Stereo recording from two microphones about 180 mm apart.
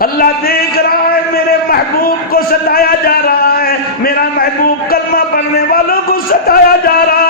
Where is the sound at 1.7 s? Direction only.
55° left (ahead or behind).